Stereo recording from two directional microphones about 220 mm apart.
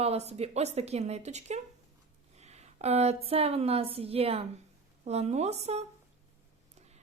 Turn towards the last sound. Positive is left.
turn(degrees=-30)  # may be behind; listen again after turning